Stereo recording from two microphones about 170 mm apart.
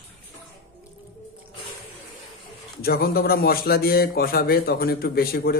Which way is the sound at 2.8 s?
65° left (ahead or behind).